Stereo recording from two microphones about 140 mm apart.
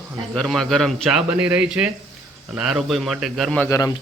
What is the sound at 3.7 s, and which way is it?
Speech, 25° left (ahead or behind).